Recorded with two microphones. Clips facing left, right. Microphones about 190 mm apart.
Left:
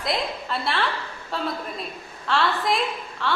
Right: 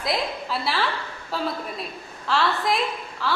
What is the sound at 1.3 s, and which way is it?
A woman's voice, centre (ahead or behind).